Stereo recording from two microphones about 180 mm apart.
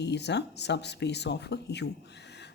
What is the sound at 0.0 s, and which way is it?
Speech, 70° left (ahead or behind).